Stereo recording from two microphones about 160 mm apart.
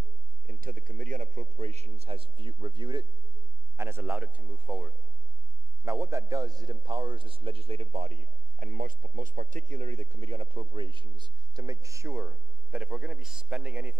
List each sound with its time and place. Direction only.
0.5 s a man's voice: 60° right (ahead or behind); by 3.1 s 30° right (ahead or behind)
3.7 s a man's voice: 15° right (ahead or behind)
5.9 s a man's voice: 20° right (ahead or behind)
12.7 s a man's voice: 5° right (ahead or behind)